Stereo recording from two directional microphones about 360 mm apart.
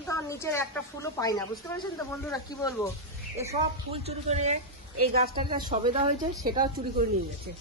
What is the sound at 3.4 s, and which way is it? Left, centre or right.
Speech, centre.